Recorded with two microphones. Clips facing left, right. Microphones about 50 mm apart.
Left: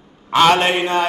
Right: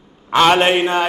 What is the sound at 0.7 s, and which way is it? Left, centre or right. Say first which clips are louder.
Mantra: right 2 dB; right.